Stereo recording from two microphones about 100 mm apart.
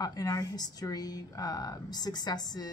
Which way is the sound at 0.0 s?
40° left (ahead or behind).